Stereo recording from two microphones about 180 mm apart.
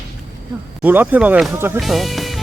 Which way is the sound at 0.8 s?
10° right (ahead or behind).